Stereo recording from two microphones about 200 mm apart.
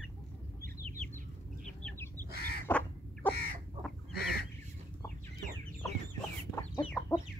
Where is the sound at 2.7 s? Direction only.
5° left (ahead or behind).